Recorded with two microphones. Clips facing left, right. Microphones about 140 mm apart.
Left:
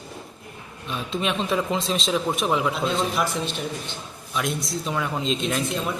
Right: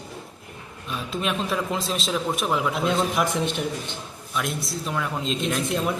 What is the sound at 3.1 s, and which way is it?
Speech, 20° right (ahead or behind).